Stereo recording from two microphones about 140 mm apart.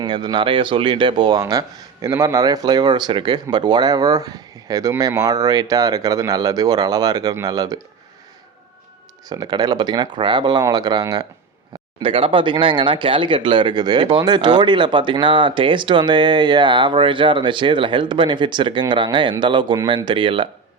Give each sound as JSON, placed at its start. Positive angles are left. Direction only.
{"t": 0.0, "sound": "speech", "side_deg": -30}
{"t": 9.3, "sound": "speech", "side_deg": -30}
{"t": 12.0, "sound": "speech", "side_deg": -40}